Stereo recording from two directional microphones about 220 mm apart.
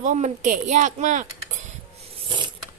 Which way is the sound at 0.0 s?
35° right (ahead or behind).